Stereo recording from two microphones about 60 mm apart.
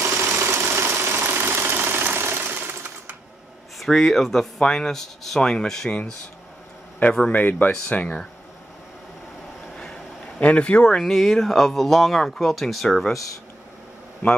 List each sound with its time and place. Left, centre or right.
0.0 s engine: right
3.8 s speech: centre; by 8.2 s left
10.4 s speech: left
11.0 s speech: centre